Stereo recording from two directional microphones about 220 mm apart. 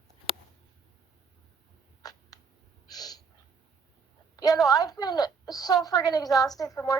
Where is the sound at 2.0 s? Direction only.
15° left (ahead or behind).